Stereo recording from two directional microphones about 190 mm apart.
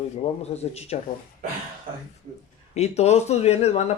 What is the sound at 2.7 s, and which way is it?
Speech, 35° left (ahead or behind).